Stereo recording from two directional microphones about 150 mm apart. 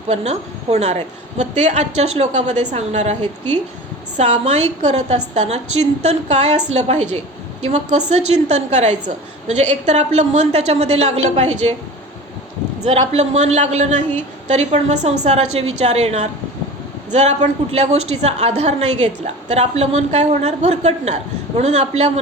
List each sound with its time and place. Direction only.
0.1 s a woman's voice: 45° right (ahead or behind)
12.8 s a woman's voice: 45° right (ahead or behind)